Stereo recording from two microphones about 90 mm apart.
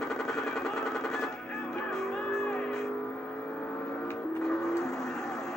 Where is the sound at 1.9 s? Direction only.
5° left (ahead or behind).